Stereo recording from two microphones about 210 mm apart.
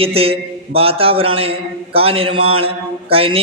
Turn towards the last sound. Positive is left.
turn(degrees=-25)  # may be behind; listen again after turning